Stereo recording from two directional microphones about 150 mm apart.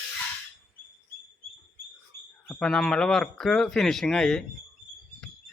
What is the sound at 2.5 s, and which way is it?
Speech, 5° left (ahead or behind).